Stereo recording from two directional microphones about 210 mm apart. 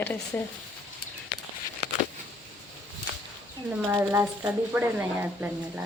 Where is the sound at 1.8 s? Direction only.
55° left (ahead or behind).